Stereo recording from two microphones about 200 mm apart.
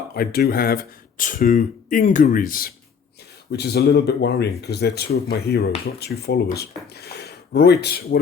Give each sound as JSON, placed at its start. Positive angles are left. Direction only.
{"t": 0.1, "sound": "speech", "side_deg": 50}